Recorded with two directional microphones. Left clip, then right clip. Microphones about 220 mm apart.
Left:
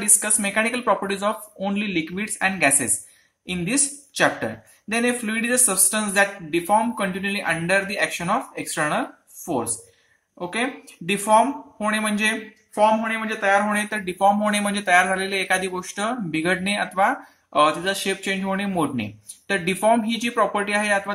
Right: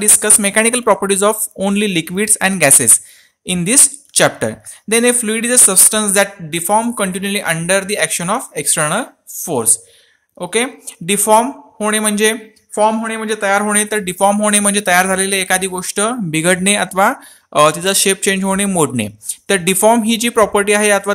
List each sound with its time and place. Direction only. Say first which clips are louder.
0.0 s speech: right 9 dB; 45° right (ahead or behind)